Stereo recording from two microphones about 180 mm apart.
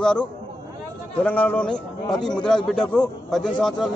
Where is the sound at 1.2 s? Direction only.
10° left (ahead or behind).